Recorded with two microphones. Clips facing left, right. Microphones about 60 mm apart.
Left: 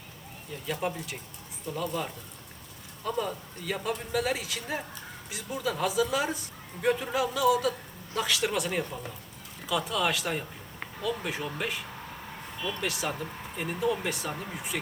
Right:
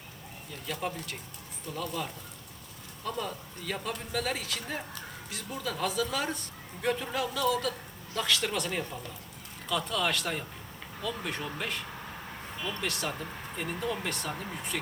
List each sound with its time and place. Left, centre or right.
0.7 s a man's voice: centre
12.8 s speech: centre